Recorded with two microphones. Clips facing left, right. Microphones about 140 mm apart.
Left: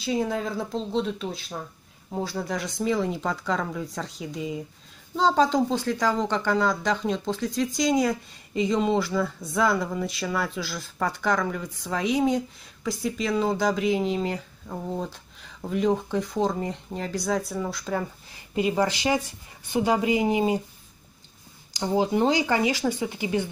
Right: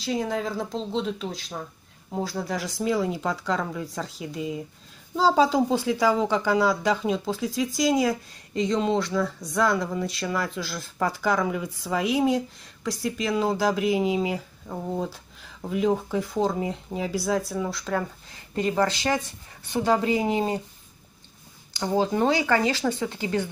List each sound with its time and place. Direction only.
0.0 s speech: centre (ahead or behind)
21.9 s speech: 15° left (ahead or behind)